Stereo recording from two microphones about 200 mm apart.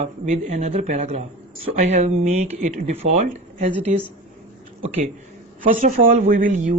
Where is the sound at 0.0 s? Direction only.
35° right (ahead or behind).